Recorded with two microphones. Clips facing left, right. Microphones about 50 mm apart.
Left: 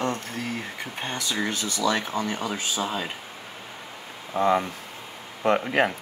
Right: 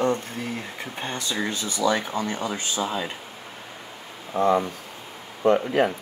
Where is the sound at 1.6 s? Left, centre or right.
Centre.